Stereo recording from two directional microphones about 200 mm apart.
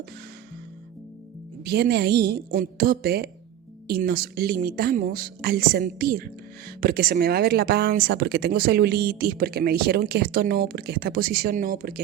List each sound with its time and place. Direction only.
1.6 s a woman's voice: 55° right (ahead or behind)